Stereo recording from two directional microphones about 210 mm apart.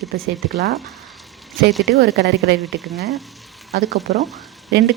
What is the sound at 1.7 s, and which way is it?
Speech, centre (ahead or behind).